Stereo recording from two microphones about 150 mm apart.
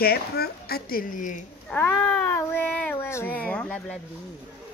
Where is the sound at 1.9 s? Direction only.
15° left (ahead or behind).